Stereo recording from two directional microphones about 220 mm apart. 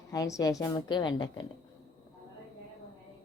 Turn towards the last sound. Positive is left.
turn(degrees=20)  # may be behind; listen again after turning